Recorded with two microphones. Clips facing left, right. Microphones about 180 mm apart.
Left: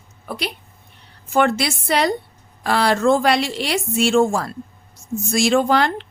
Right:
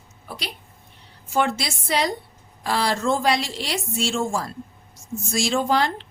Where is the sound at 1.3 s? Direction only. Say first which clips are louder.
Left 5 dB; 65° left (ahead or behind).